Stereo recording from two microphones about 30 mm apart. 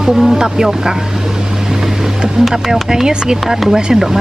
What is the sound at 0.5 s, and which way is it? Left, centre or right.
Speech, centre.